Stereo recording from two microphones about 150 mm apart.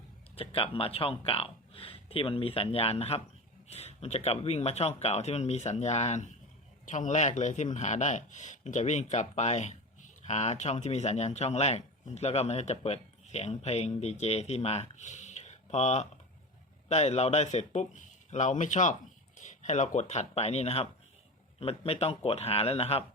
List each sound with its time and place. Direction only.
0.3 s speech: 40° left (ahead or behind)